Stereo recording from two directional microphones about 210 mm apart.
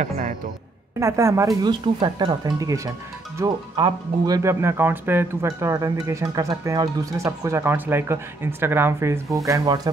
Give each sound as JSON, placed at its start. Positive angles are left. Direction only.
{"t": 0.9, "sound": "speech", "side_deg": -15}